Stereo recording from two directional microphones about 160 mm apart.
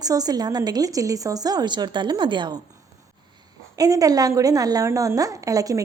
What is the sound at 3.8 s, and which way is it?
Speech, 20° right (ahead or behind).